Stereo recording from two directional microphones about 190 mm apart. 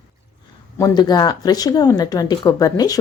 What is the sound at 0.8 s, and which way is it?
A woman's voice, 20° left (ahead or behind).